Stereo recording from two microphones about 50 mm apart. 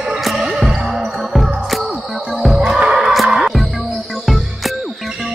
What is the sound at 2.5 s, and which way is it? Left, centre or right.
Music, centre.